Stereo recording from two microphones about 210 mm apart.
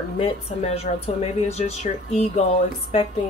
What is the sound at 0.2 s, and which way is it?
A woman's voice, 30° left (ahead or behind).